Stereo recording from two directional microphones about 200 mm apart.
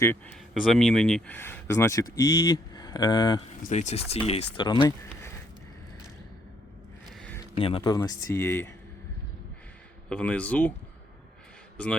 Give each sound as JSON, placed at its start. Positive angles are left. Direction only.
{"t": 0.0, "sound": "speech", "side_deg": 10}
{"t": 0.5, "sound": "speech", "side_deg": 0}
{"t": 3.7, "sound": "speech", "side_deg": 35}
{"t": 7.2, "sound": "a sound", "side_deg": 5}
{"t": 7.5, "sound": "speech", "side_deg": 25}
{"t": 10.1, "sound": "speech", "side_deg": 5}